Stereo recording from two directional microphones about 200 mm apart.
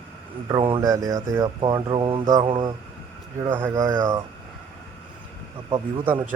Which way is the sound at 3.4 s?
15° right (ahead or behind).